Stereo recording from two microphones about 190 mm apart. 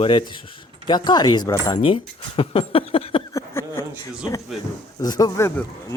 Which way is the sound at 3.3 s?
15° left (ahead or behind).